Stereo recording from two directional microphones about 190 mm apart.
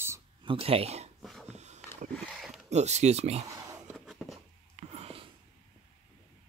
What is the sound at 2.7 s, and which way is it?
Speech, 35° right (ahead or behind).